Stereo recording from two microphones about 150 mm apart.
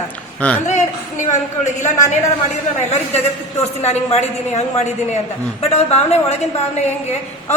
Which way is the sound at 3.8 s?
45° left (ahead or behind).